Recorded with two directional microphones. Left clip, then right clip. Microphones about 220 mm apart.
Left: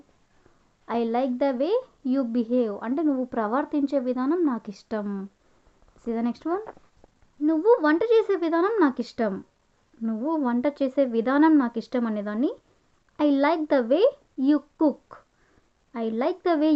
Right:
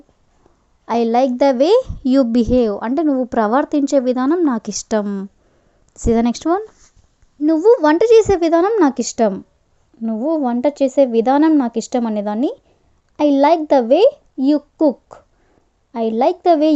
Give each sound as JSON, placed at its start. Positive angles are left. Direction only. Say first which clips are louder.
{"t": 0.9, "sound": "a woman's voice", "louder": "right 10 dB", "side_deg": -35}